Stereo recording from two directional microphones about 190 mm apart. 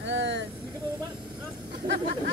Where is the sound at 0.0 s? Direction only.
70° right (ahead or behind).